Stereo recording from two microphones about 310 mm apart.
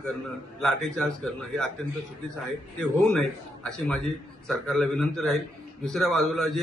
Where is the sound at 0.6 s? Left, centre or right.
Centre.